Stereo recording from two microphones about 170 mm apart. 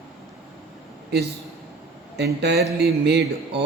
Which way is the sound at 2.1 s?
80° right.